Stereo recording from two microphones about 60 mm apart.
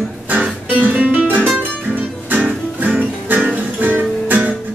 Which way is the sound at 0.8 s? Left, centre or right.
Right.